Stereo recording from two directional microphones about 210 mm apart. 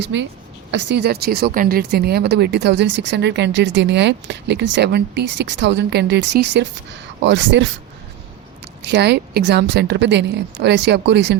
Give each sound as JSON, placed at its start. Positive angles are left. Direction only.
{"t": 0.0, "sound": "speech", "side_deg": -55}